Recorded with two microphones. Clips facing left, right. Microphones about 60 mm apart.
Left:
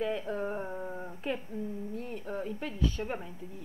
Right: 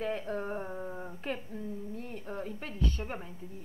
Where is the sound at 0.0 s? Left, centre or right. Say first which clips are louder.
Left 2 dB; right.